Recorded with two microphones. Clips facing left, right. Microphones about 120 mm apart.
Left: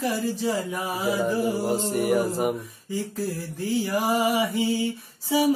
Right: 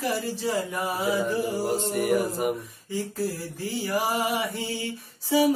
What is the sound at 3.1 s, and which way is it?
Music, centre (ahead or behind).